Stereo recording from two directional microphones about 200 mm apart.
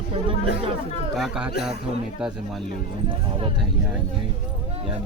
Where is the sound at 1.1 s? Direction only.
Centre (ahead or behind).